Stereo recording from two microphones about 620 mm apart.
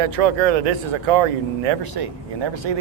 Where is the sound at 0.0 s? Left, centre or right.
Right.